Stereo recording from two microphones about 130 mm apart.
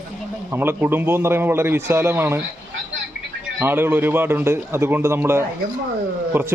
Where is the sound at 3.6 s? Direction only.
15° right (ahead or behind).